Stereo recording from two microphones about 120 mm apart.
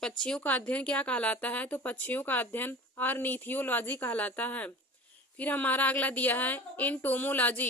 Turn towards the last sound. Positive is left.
turn(degrees=15)  # may be behind; listen again after turning